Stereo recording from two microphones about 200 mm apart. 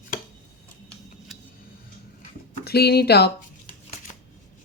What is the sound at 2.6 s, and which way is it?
Speech, 55° left (ahead or behind).